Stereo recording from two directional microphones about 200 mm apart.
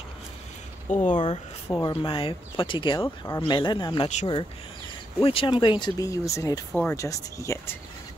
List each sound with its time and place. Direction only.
0.9 s speech: 40° left (ahead or behind)
1.2 s speech: 20° left (ahead or behind)
5.2 s speech: 25° left (ahead or behind)
6.7 s speech: 5° left (ahead or behind)
7.0 s speech: 15° left (ahead or behind)